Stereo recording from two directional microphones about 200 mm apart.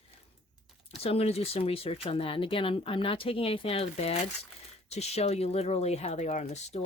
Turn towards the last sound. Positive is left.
turn(degrees=35)  # may be behind; listen again after turning